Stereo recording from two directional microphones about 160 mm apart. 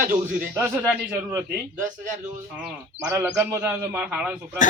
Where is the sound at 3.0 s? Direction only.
15° right (ahead or behind).